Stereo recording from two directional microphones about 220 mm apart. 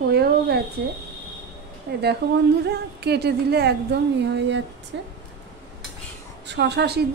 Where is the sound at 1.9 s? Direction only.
45° right (ahead or behind).